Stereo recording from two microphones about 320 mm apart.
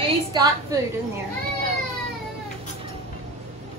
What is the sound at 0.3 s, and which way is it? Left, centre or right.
Speech, centre.